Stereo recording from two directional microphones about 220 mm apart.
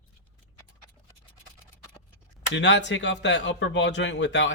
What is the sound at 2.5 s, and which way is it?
Speech, 55° left (ahead or behind).